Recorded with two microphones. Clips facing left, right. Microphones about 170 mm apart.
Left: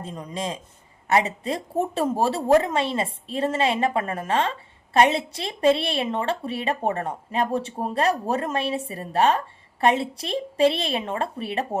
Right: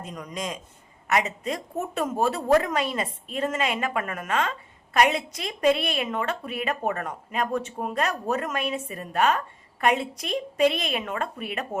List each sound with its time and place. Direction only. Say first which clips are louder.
0.0 s a man's voice: left 3 dB; 30° left (ahead or behind)